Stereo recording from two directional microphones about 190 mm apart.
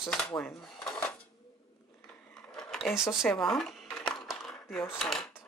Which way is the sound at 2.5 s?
Centre (ahead or behind).